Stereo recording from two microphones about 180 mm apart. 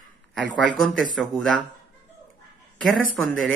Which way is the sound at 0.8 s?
Centre (ahead or behind).